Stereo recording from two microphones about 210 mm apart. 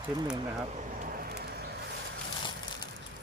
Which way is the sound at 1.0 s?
45° right (ahead or behind).